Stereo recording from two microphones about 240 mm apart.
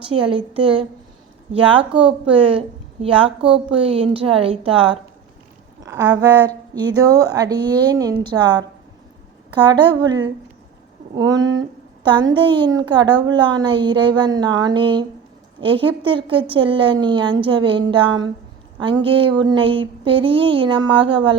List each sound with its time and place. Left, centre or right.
0.1 s a woman's voice: right
2.3 s a woman's voice: right